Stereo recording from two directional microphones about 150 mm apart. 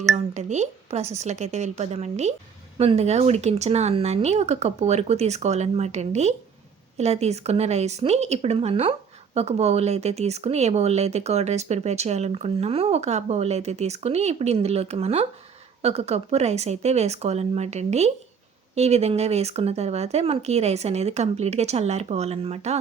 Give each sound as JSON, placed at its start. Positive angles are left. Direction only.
{"t": 0.1, "sound": "a woman's voice", "side_deg": -50}